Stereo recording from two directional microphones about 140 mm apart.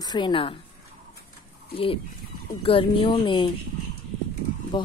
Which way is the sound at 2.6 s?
40° left (ahead or behind).